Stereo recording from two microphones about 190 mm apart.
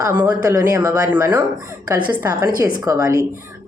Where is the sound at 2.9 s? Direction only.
15° right (ahead or behind).